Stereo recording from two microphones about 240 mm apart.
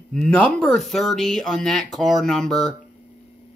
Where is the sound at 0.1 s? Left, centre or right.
Centre.